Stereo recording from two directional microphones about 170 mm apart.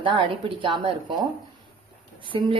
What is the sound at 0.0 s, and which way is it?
A woman's voice, 30° right (ahead or behind).